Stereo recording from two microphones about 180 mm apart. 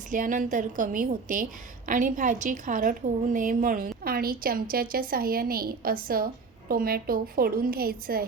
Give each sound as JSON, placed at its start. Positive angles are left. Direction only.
{"t": 0.1, "sound": "a woman's voice", "side_deg": -45}